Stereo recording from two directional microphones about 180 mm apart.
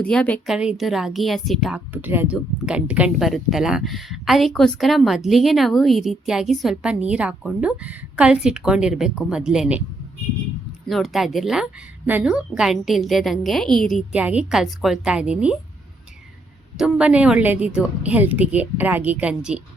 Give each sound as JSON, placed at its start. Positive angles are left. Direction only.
{"t": 0.0, "sound": "speech", "side_deg": 5}
{"t": 10.8, "sound": "speech", "side_deg": 0}
{"t": 16.7, "sound": "a woman's voice", "side_deg": -5}